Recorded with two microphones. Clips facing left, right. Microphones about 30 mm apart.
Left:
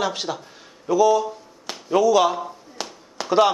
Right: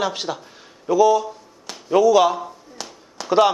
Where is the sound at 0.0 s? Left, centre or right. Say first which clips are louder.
Right 1 dB; centre.